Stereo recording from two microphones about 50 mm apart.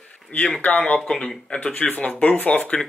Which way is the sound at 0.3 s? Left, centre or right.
Left.